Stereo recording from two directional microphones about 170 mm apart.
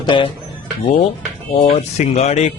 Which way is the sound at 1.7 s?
40° left (ahead or behind).